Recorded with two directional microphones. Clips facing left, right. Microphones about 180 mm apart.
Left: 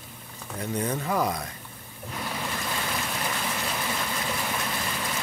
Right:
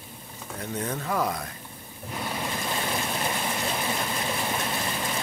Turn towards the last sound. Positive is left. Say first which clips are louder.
# right 2 dB
turn(degrees=-25)  # may be behind; listen again after turning